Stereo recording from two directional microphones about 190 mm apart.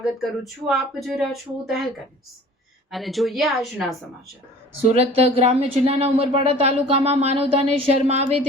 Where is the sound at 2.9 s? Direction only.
Centre (ahead or behind).